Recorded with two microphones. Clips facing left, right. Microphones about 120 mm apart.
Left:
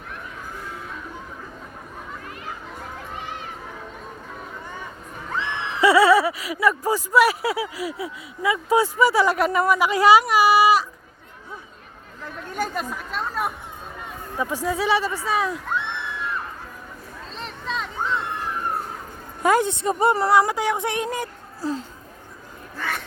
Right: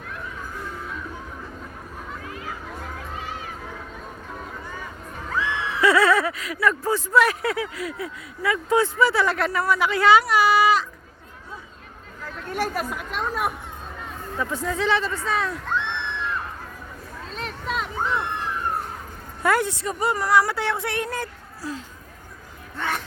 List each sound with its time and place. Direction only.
5.3 s a sound: 20° left (ahead or behind)
5.8 s speech: 10° left (ahead or behind)
12.5 s speech: 5° right (ahead or behind)
14.3 s speech: 15° left (ahead or behind)
17.3 s a sound: 5° right (ahead or behind)
19.4 s a woman's voice: 20° left (ahead or behind)